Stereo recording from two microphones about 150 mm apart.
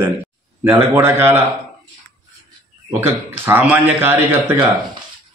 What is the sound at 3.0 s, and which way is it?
Speech, 15° right (ahead or behind).